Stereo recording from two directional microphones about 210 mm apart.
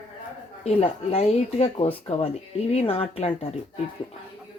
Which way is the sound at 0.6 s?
30° left (ahead or behind).